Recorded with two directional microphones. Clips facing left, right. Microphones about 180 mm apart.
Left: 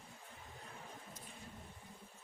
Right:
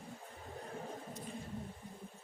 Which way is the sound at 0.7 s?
40° right (ahead or behind).